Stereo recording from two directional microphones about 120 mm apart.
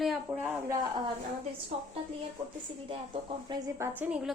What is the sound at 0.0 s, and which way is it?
Speech, centre (ahead or behind).